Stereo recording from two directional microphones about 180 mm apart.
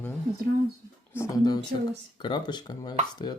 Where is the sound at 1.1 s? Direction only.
20° left (ahead or behind).